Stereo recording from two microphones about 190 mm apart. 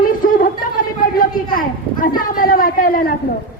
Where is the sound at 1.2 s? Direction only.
45° left (ahead or behind).